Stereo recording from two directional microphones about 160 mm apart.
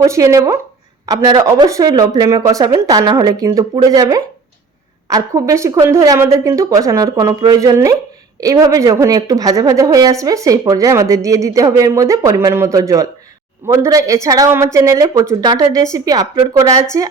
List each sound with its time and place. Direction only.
0.0 s a woman's voice: 20° right (ahead or behind)